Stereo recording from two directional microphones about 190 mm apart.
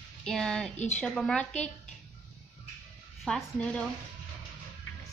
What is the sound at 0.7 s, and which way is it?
Speech, 35° left (ahead or behind).